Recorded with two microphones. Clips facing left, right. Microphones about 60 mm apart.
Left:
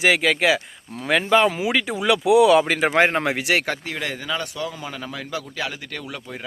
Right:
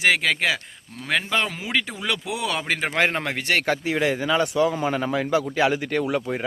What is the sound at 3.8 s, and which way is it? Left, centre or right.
Speech, centre.